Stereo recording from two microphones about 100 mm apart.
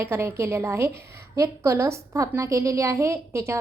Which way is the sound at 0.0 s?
25° right (ahead or behind).